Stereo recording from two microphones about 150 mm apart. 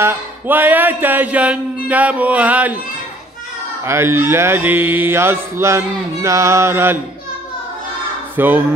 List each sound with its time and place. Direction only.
0.0 s mantra: 15° right (ahead or behind)
3.8 s mantra: 15° right (ahead or behind)
8.4 s mantra: 10° right (ahead or behind)